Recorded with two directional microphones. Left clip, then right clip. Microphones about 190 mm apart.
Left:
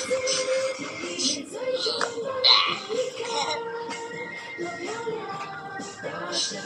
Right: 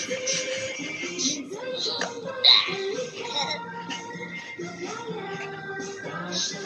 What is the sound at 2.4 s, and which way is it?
Music, 20° left (ahead or behind).